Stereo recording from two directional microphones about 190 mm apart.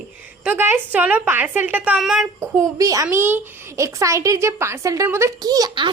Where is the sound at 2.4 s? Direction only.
15° right (ahead or behind).